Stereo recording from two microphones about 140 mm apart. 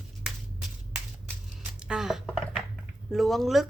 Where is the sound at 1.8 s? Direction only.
5° right (ahead or behind).